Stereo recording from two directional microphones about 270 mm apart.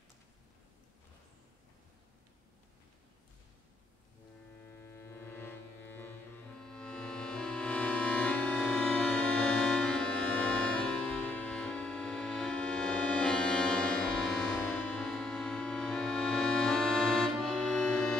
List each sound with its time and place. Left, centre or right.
4.7 s music: centre